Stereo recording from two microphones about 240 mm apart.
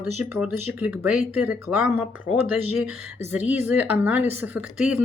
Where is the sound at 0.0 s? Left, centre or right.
Centre.